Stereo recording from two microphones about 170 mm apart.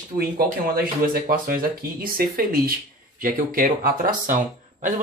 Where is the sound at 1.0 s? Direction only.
60° right (ahead or behind).